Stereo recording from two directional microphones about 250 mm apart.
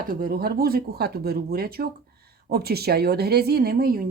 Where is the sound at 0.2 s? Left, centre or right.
Right.